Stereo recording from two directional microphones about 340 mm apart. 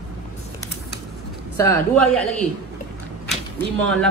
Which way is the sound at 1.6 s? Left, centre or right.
Centre.